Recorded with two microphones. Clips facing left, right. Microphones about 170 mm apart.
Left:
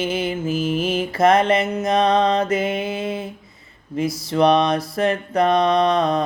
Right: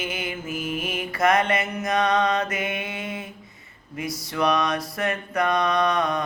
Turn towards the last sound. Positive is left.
turn(degrees=30)  # may be behind; listen again after turning